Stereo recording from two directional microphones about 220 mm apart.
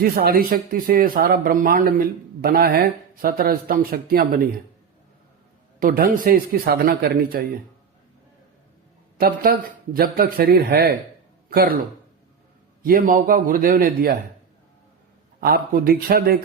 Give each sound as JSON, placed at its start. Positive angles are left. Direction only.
{"t": 0.0, "sound": "speech", "side_deg": -45}
{"t": 5.8, "sound": "speech", "side_deg": -40}
{"t": 9.1, "sound": "speech", "side_deg": -45}
{"t": 15.4, "sound": "speech", "side_deg": -45}